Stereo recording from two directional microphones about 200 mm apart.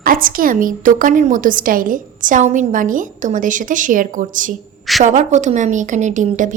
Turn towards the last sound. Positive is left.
turn(degrees=-40)  # may be behind; listen again after turning